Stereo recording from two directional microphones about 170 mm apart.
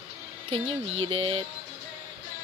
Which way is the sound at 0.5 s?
35° right (ahead or behind).